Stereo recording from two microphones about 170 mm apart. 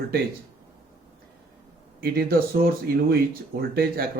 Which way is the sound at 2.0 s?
65° right (ahead or behind).